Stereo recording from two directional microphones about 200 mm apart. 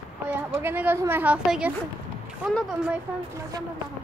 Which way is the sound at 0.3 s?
10° right (ahead or behind).